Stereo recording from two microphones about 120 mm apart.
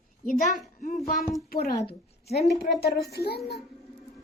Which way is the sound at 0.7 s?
90° left.